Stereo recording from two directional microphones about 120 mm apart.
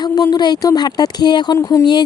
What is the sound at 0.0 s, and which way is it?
Speech, 35° left (ahead or behind).